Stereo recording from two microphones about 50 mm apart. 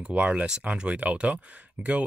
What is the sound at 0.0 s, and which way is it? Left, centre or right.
Speech, right.